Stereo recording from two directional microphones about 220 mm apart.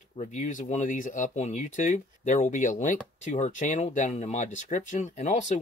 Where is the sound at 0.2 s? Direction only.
35° left (ahead or behind).